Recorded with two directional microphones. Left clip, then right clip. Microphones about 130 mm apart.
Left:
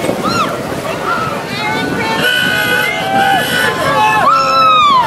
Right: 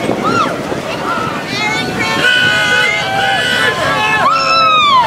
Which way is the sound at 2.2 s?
Centre (ahead or behind).